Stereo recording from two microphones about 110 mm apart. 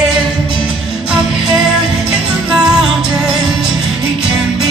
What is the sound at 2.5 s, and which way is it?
Music, 5° right (ahead or behind).